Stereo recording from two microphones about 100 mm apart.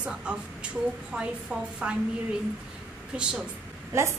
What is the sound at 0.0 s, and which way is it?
A woman's voice, 10° right (ahead or behind).